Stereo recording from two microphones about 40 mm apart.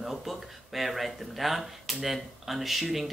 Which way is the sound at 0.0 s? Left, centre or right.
Centre.